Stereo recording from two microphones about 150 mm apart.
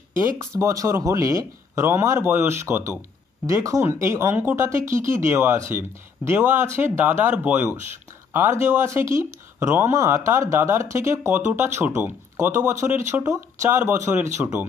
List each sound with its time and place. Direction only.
0.4 s speech: 20° right (ahead or behind)